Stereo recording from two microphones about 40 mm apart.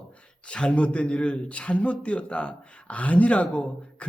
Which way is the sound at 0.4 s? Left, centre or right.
Left.